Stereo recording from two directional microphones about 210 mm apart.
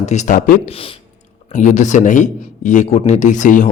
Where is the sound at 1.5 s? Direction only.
35° left (ahead or behind).